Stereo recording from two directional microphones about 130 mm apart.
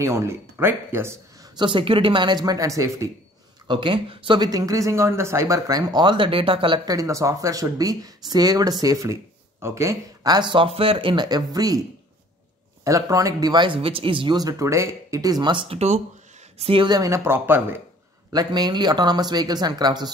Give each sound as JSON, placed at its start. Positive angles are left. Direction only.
{"t": 0.0, "sound": "speech", "side_deg": -20}
{"t": 1.6, "sound": "speech", "side_deg": -40}
{"t": 3.6, "sound": "speech", "side_deg": -40}
{"t": 6.9, "sound": "speech", "side_deg": -25}
{"t": 12.8, "sound": "speech", "side_deg": -25}
{"t": 16.9, "sound": "speech", "side_deg": -25}
{"t": 18.3, "sound": "speech", "side_deg": -30}